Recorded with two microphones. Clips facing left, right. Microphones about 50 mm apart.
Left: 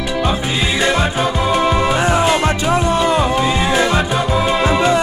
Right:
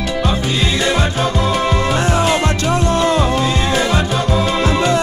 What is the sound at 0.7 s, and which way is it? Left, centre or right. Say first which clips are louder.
Music: left 3 dB; centre.